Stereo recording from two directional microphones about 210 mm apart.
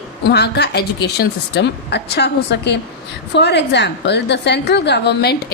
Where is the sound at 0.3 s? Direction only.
50° left (ahead or behind).